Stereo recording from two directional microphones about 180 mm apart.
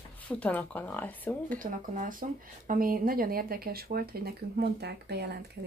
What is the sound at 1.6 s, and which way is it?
Speech, 50° right (ahead or behind).